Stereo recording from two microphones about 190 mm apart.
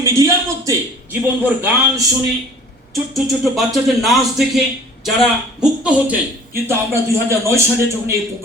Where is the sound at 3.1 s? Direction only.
Centre (ahead or behind).